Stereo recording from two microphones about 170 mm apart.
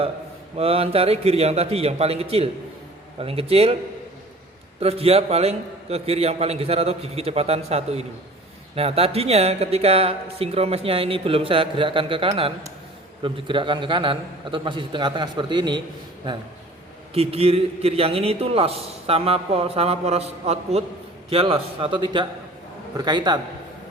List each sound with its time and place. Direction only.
0.5 s speech: 35° right (ahead or behind)
4.8 s a man's voice: 35° right (ahead or behind)
17.2 s a man's voice: 35° right (ahead or behind)